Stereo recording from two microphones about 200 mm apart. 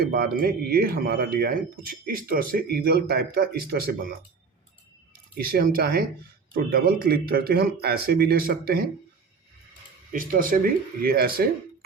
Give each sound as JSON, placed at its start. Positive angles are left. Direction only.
{"t": 0.0, "sound": "speech", "side_deg": -50}
{"t": 5.4, "sound": "speech", "side_deg": -50}
{"t": 10.1, "sound": "speech", "side_deg": -45}